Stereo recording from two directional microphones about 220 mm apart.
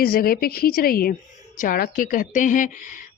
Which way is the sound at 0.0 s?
40° left (ahead or behind).